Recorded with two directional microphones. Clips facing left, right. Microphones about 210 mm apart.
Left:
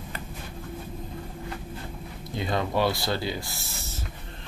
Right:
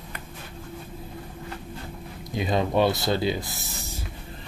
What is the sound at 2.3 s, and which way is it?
Speech, 20° right (ahead or behind).